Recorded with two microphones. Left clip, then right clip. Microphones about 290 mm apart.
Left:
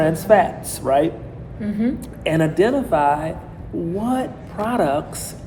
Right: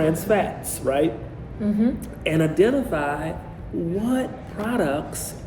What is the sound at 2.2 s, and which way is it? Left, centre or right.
A man's voice, centre.